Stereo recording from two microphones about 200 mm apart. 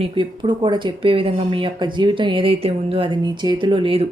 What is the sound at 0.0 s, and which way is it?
Speech, 25° right (ahead or behind).